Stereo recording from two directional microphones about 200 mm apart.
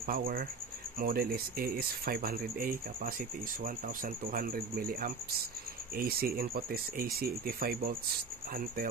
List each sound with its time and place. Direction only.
0.0 s speech: 45° right (ahead or behind)